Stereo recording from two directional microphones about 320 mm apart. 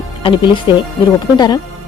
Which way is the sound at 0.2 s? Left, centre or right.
Centre.